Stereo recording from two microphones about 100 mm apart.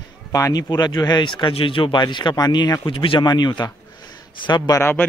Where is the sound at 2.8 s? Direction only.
60° left (ahead or behind).